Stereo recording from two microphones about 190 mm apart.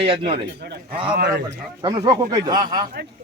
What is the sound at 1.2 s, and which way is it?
Speech, 60° right (ahead or behind).